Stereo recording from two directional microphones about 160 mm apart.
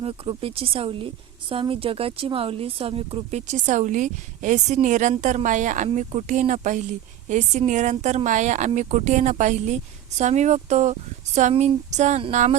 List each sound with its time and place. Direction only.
0.0 s a woman's voice: 35° right (ahead or behind)